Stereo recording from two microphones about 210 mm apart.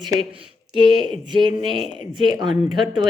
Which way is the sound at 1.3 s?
20° right (ahead or behind).